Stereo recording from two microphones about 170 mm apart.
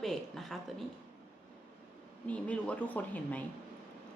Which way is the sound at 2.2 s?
10° left (ahead or behind).